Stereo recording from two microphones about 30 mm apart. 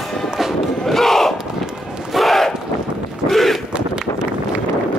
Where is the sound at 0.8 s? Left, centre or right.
Centre.